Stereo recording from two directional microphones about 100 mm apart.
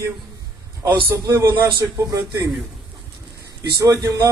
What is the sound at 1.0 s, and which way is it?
A man's voice, 30° right (ahead or behind).